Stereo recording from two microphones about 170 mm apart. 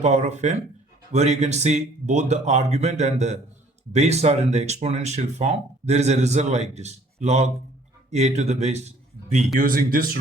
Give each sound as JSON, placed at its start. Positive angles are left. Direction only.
{"t": 0.0, "sound": "speech", "side_deg": -45}
{"t": 9.6, "sound": "speech", "side_deg": -60}